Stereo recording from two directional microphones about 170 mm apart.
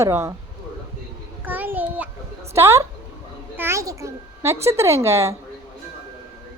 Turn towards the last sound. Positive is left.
turn(degrees=-15)  # may be behind; listen again after turning